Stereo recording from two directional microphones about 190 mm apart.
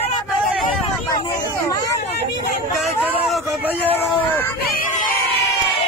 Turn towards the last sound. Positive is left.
turn(degrees=45)  # may be behind; listen again after turning